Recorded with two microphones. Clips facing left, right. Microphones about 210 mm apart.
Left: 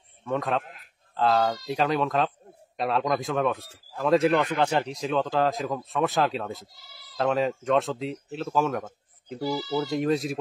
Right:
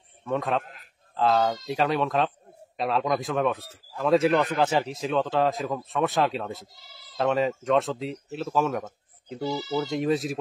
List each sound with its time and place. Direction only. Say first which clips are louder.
0.2 s speech: even; centre (ahead or behind)
6.7 s speech: right 1 dB; 20° right (ahead or behind)
7.2 s speech: right 1 dB; centre (ahead or behind)
9.4 s speech: left 1 dB; 25° right (ahead or behind)
9.8 s speech: even; centre (ahead or behind)